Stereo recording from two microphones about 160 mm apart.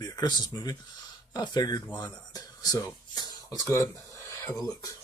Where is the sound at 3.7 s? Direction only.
15° left (ahead or behind).